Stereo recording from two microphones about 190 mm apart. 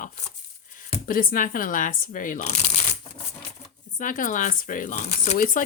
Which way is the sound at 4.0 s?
45° left (ahead or behind).